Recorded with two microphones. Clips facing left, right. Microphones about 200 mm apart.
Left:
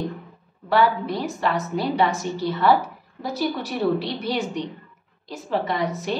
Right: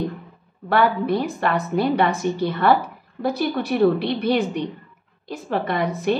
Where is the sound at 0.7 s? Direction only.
55° right (ahead or behind).